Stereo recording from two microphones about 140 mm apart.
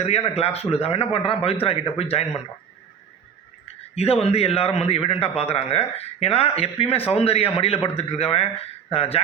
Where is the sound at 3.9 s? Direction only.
45° left (ahead or behind).